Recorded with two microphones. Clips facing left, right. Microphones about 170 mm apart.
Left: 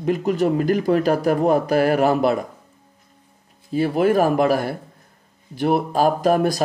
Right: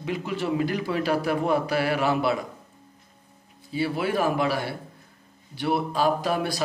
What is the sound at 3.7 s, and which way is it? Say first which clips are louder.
Speech: left 8 dB; 45° left (ahead or behind).